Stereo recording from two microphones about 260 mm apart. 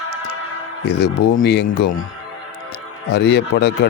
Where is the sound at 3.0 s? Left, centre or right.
Left.